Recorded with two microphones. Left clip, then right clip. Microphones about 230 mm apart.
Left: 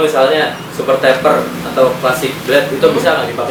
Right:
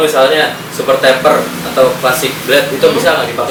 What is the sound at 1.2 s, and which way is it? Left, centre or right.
A woman's voice, centre.